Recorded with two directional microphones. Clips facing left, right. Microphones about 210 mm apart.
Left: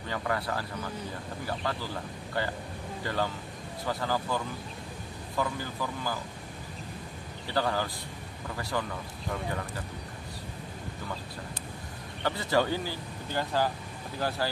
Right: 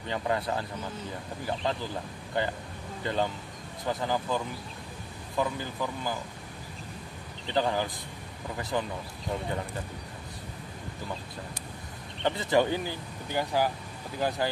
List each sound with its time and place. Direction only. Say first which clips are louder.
0.1 s speech: right 2 dB; 20° right (ahead or behind)
5.4 s speech: right 2 dB; 20° right (ahead or behind)
7.4 s speech: right 2 dB; 20° right (ahead or behind)
12.2 s speech: right 2 dB; 20° right (ahead or behind)